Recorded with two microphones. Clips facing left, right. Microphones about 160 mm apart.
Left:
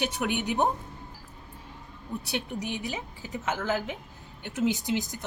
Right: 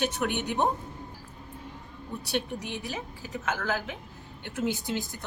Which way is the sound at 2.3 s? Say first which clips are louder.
Right 2 dB; 15° left (ahead or behind).